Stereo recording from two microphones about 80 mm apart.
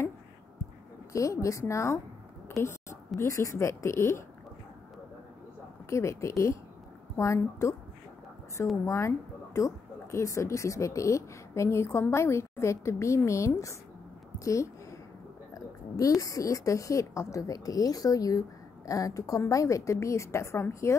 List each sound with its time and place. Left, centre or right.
1.1 s speech: left
2.4 s a sound: left
3.3 s speech: left
5.9 s speech: left
8.8 s speech: left
14.4 s a sound: left
15.5 s a woman's voice: left